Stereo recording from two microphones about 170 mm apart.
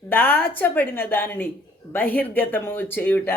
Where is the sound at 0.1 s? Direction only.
10° left (ahead or behind).